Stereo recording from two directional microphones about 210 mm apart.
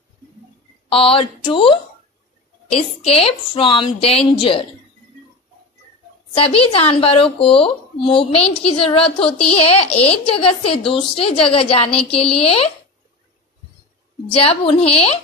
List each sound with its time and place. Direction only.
0.9 s a woman's voice: 25° left (ahead or behind)
6.3 s a woman's voice: 25° left (ahead or behind)
14.3 s a woman's voice: 30° left (ahead or behind)